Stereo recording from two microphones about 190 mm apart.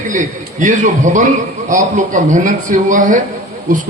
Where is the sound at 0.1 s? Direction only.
40° right (ahead or behind).